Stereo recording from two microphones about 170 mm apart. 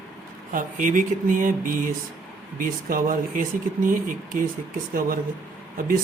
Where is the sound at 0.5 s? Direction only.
50° right (ahead or behind).